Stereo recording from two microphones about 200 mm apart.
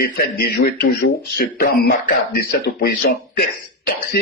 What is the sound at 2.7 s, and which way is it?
Speech, 50° left (ahead or behind).